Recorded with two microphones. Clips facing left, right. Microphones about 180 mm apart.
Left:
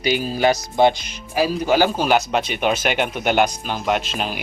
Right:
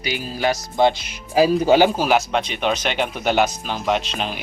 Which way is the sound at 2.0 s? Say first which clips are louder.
Even; centre (ahead or behind).